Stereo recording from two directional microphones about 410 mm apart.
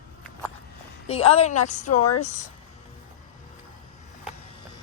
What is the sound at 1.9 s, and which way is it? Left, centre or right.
Speech, left.